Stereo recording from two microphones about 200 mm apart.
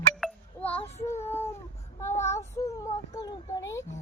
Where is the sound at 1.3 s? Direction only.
15° left (ahead or behind).